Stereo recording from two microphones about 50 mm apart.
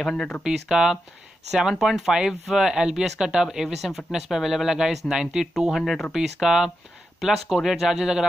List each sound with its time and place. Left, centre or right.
0.1 s speech: centre
0.4 s speech: centre
5.6 s speech: centre
6.1 s speech: centre